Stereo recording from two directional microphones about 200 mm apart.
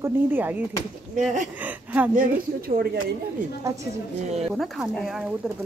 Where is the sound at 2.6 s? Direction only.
45° right (ahead or behind).